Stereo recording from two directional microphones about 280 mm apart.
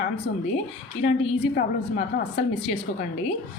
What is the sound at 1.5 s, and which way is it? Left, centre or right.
Speech, left.